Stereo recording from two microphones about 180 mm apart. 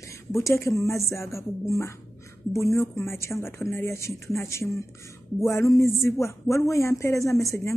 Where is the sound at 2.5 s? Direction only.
15° left (ahead or behind).